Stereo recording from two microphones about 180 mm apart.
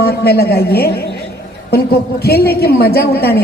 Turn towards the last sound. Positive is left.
turn(degrees=60)  # may be behind; listen again after turning